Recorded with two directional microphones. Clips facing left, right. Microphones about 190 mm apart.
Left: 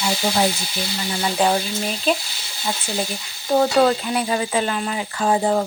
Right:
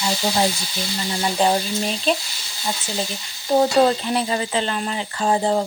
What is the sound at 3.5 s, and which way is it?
Stir, 20° right (ahead or behind).